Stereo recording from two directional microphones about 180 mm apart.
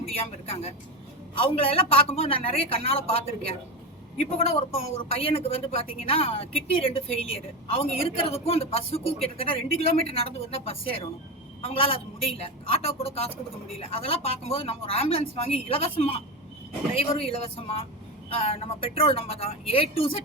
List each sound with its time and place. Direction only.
0.1 s a woman's voice: 35° left (ahead or behind)
4.2 s a woman's voice: 35° left (ahead or behind)